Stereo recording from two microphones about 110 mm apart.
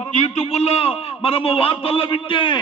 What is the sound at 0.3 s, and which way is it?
A man's voice, 65° left (ahead or behind).